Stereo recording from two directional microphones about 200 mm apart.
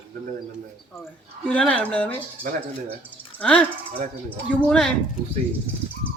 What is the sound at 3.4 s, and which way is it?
Speech, 5° left (ahead or behind).